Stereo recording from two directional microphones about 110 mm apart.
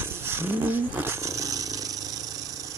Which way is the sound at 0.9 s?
25° right (ahead or behind).